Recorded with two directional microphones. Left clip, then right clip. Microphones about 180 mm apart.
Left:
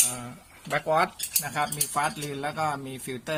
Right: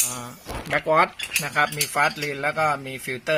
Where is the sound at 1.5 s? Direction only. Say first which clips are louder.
Right 6 dB; 30° right (ahead or behind).